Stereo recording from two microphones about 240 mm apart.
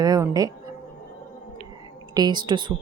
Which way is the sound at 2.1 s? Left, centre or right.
Centre.